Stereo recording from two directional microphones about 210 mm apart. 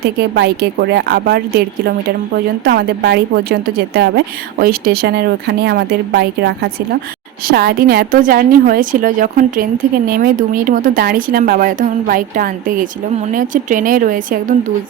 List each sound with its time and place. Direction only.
0.0 s speech: 50° right (ahead or behind)
2.6 s speech: 45° right (ahead or behind)